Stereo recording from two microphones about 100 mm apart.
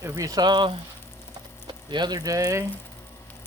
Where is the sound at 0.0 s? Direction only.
35° right (ahead or behind).